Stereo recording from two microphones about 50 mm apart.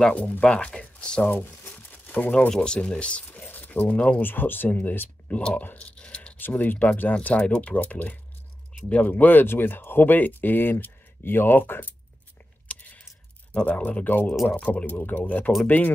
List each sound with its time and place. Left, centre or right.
0.1 s speech: left
0.4 s speech: centre
1.2 s speech: left
1.7 s crumpling: left
2.6 s speech: centre
3.3 s speech: left
5.8 s a sound: left
6.4 s speech: left
7.2 s speech: left
12.7 s a sound: left
13.5 s speech: left